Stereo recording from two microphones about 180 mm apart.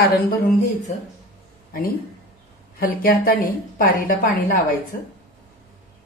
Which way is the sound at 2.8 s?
55° left (ahead or behind).